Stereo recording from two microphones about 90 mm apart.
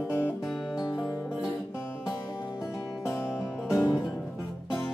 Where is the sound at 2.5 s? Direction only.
5° right (ahead or behind).